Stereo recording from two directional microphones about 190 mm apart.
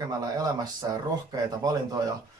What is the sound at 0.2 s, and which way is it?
Speech, 20° right (ahead or behind).